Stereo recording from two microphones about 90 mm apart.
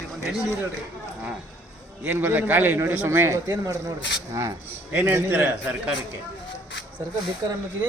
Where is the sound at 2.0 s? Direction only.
20° right (ahead or behind).